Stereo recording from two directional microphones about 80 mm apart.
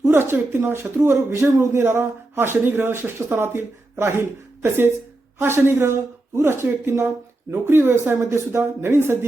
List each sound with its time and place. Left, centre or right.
0.0 s speech: right